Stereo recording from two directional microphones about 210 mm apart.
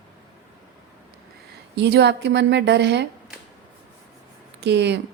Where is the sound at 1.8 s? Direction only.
55° right (ahead or behind).